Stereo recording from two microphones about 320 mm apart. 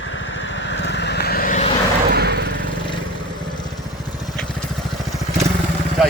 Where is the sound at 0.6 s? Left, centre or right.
Left.